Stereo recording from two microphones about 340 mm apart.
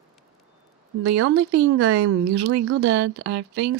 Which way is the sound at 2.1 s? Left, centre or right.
Right.